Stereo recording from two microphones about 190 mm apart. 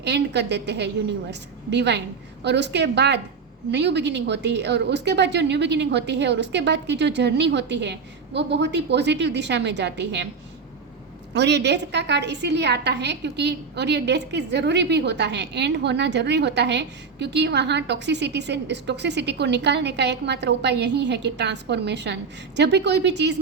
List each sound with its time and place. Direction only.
0.0 s a woman's voice: 65° right (ahead or behind)
11.3 s a woman's voice: 65° right (ahead or behind)